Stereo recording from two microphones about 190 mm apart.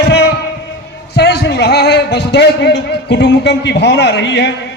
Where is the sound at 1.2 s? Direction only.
60° left (ahead or behind).